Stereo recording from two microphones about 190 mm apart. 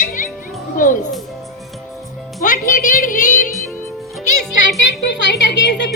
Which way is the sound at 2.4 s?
45° left (ahead or behind).